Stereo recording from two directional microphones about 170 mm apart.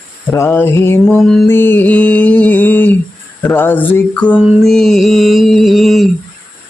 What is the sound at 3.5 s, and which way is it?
Mantra, 10° left (ahead or behind).